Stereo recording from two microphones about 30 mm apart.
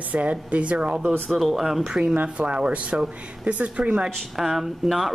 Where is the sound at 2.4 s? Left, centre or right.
Right.